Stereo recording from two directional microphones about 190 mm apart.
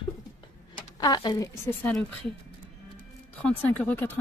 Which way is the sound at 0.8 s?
20° left (ahead or behind).